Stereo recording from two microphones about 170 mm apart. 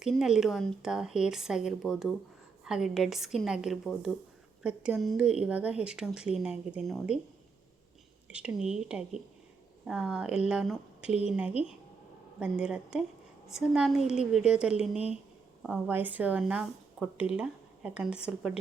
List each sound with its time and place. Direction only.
0.0 s speech: centre (ahead or behind)
8.3 s a woman's voice: 5° right (ahead or behind)